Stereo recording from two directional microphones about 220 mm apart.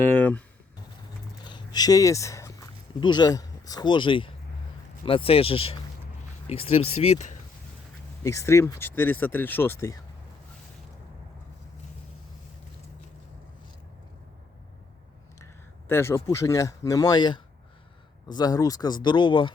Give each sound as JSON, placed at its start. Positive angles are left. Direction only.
{"t": 0.0, "sound": "a sound", "side_deg": 10}
{"t": 1.5, "sound": "speech", "side_deg": 20}
{"t": 8.2, "sound": "speech", "side_deg": 15}
{"t": 15.9, "sound": "speech", "side_deg": 10}